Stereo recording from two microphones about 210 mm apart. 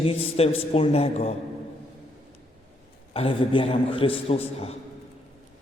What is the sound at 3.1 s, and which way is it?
A man's voice, 25° left (ahead or behind).